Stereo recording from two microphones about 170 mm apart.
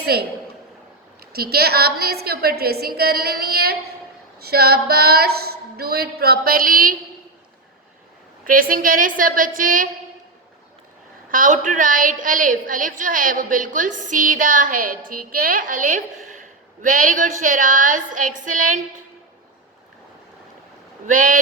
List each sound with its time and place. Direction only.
0.0 s a woman's voice: 70° right (ahead or behind)
1.3 s a woman's voice: 65° right (ahead or behind)
8.4 s a woman's voice: 55° right (ahead or behind)
11.3 s a woman's voice: 50° right (ahead or behind)
21.1 s a woman's voice: 50° right (ahead or behind)